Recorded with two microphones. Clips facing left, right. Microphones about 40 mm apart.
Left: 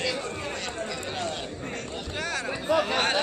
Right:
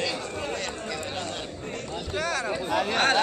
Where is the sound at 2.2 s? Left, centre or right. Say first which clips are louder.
Right 3 dB; left.